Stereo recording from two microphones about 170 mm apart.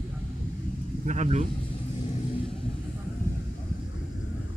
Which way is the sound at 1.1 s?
45° right (ahead or behind).